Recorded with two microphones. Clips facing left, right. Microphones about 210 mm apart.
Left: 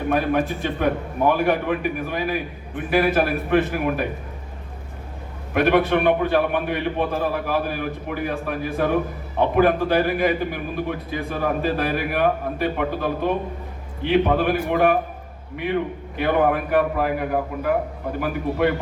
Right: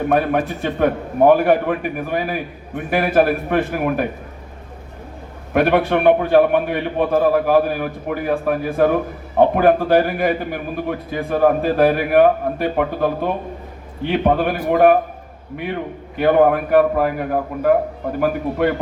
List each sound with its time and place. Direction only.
0.1 s a man's voice: 50° right (ahead or behind)
5.5 s a man's voice: 50° right (ahead or behind)